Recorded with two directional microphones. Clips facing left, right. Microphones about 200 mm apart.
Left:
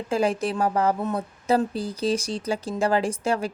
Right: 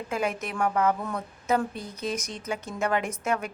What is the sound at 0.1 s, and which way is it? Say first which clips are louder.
A woman's voice: left 7 dB; 30° left (ahead or behind).